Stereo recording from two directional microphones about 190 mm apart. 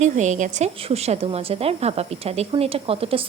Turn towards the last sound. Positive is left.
turn(degrees=-30)  # may be behind; listen again after turning